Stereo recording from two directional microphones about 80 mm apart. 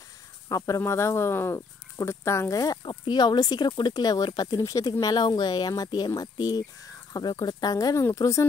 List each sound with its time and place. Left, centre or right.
0.5 s speech: left
2.8 s speech: left
4.3 s speech: left
4.6 s speech: left
8.0 s speech: left